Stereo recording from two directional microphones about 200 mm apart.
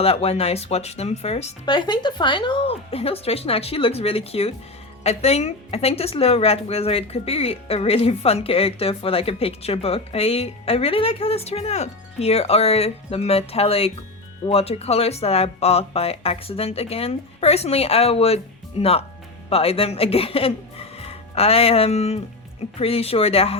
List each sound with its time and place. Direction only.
0.0 s a woman's voice: 30° left (ahead or behind)